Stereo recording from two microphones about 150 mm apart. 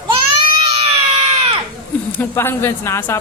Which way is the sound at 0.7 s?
40° right (ahead or behind).